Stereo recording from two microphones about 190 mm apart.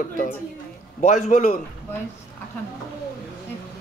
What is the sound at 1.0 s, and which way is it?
Speech, 35° left (ahead or behind).